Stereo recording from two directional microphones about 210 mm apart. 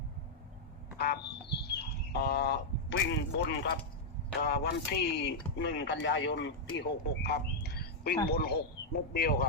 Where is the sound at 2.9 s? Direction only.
55° left (ahead or behind).